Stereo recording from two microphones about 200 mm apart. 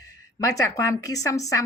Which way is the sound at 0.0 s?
15° left (ahead or behind).